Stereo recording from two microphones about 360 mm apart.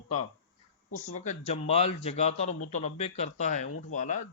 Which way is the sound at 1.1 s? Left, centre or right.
Centre.